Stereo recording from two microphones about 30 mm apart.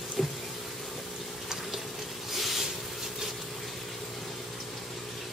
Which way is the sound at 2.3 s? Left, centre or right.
Centre.